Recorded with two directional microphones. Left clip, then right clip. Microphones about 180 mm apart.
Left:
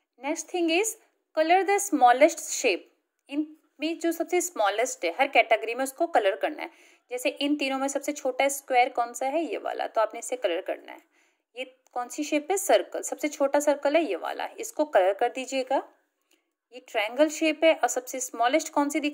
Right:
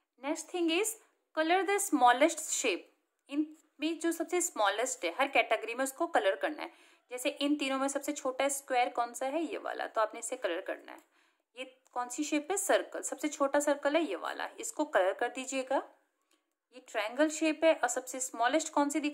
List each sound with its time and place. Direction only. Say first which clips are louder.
0.2 s a woman's voice: left 6 dB; 15° left (ahead or behind)
3.8 s a woman's voice: left 5 dB; 15° left (ahead or behind)